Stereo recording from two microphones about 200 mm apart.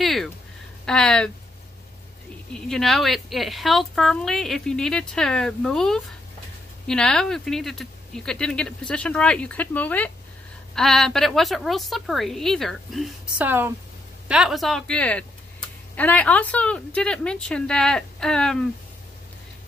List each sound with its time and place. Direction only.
0.0 s a sound: centre (ahead or behind)
0.8 s a woman's voice: 5° left (ahead or behind)
2.5 s a woman's voice: centre (ahead or behind)